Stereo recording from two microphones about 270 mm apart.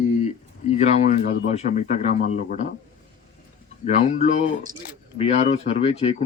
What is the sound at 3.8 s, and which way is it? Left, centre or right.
Speech, left.